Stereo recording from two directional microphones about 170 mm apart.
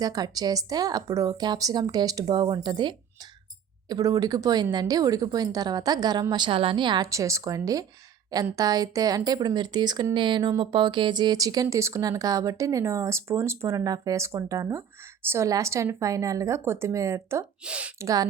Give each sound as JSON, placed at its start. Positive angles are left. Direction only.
{"t": 0.0, "sound": "a woman's voice", "side_deg": -20}
{"t": 18.0, "sound": "speech", "side_deg": -20}